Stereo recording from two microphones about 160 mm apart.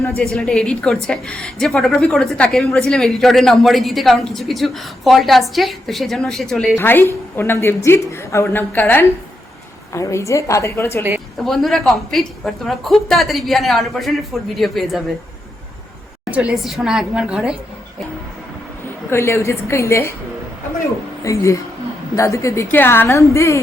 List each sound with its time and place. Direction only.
0.3 s a woman's voice: 5° left (ahead or behind)
11.3 s a woman's voice: centre (ahead or behind)
16.3 s a woman's voice: 5° right (ahead or behind)
19.1 s a woman's voice: 15° left (ahead or behind)
21.2 s a woman's voice: 20° left (ahead or behind)